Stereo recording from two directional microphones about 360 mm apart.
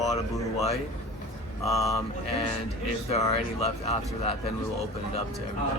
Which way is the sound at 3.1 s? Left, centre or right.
Centre.